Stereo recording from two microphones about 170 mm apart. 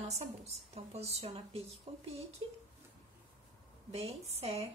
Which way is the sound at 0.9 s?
35° right (ahead or behind).